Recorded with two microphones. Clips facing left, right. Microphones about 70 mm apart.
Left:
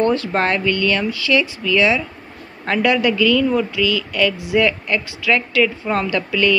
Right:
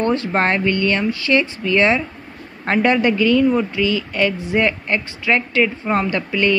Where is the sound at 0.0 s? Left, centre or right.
Right.